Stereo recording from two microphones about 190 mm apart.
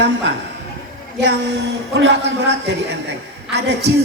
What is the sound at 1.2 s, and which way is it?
Speech, 65° right (ahead or behind).